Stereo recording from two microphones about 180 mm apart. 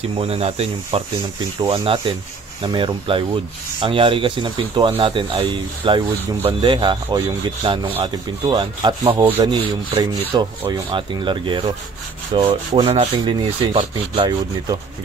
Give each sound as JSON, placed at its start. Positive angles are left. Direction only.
{"t": 0.1, "sound": "speech", "side_deg": -30}